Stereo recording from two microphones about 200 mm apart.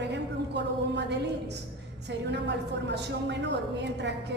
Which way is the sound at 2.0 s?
60° right (ahead or behind).